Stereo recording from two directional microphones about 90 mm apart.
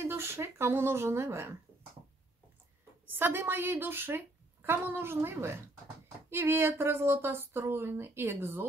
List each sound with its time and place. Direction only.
0.0 s a woman's voice: 30° right (ahead or behind)
3.1 s a woman's voice: 25° right (ahead or behind)